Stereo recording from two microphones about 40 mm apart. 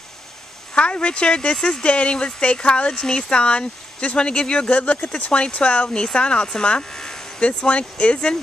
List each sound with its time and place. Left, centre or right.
0.7 s speech: left
7.4 s speech: left